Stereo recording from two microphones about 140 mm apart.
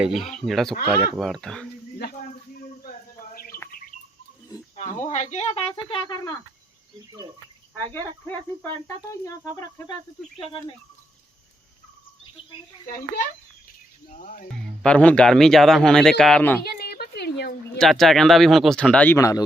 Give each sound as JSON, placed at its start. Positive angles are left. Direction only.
{"t": 0.0, "sound": "a man's voice", "side_deg": 0}
{"t": 3.3, "sound": "bird", "side_deg": 90}
{"t": 5.0, "sound": "speech", "side_deg": 55}
{"t": 9.2, "sound": "speech", "side_deg": 20}
{"t": 14.1, "sound": "speech", "side_deg": 65}
{"t": 14.8, "sound": "a man's voice", "side_deg": 10}
{"t": 16.6, "sound": "a sound", "side_deg": 90}
{"t": 17.7, "sound": "a man's voice", "side_deg": 0}